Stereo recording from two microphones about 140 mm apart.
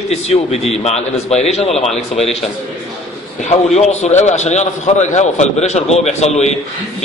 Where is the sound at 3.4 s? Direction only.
55° left (ahead or behind).